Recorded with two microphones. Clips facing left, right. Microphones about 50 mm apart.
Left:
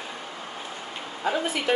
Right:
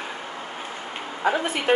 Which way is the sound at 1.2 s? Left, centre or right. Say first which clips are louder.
Right 3 dB; right.